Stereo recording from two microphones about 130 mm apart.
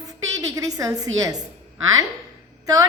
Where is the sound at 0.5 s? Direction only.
25° right (ahead or behind).